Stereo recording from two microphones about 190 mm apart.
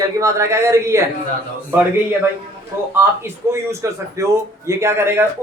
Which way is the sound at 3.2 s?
15° right (ahead or behind).